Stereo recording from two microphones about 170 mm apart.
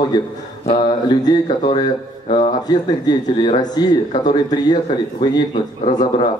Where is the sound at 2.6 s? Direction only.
25° left (ahead or behind).